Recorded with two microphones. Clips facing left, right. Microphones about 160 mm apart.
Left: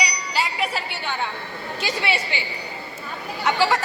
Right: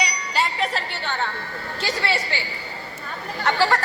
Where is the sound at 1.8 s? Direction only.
15° left (ahead or behind).